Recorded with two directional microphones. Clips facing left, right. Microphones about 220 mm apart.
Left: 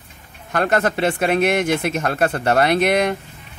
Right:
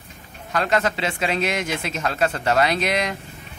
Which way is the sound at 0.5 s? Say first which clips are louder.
Left 3 dB; 55° left (ahead or behind).